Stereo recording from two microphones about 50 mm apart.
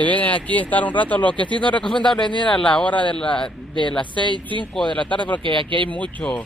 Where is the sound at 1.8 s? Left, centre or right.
Centre.